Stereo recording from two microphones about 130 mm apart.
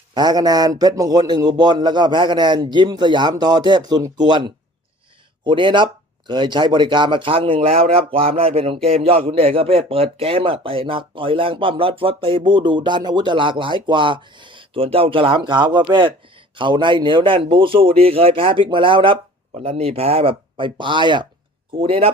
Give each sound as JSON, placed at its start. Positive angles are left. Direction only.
{"t": 0.1, "sound": "speech", "side_deg": -30}